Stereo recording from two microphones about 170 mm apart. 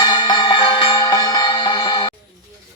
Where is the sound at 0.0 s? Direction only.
25° left (ahead or behind).